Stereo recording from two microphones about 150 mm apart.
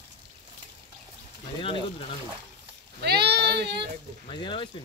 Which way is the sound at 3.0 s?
90° right.